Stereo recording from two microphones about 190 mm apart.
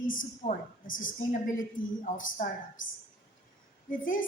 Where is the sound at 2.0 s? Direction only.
45° left (ahead or behind).